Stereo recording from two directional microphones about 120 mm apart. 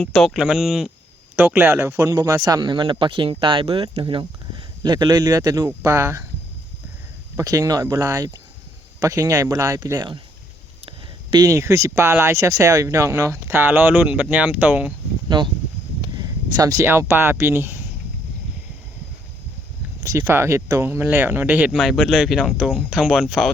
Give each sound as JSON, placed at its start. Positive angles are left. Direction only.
{"t": 0.0, "sound": "speech", "side_deg": 0}
{"t": 7.3, "sound": "speech", "side_deg": -30}
{"t": 10.8, "sound": "a sound", "side_deg": -40}
{"t": 11.4, "sound": "speech", "side_deg": -25}
{"t": 16.1, "sound": "speech", "side_deg": -30}
{"t": 20.0, "sound": "speech", "side_deg": -25}
{"t": 21.7, "sound": "speech", "side_deg": 0}